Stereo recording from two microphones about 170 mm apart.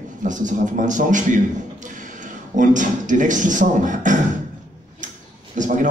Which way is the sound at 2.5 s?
50° right (ahead or behind).